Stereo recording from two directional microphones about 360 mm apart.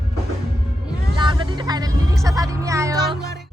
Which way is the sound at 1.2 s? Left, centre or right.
Centre.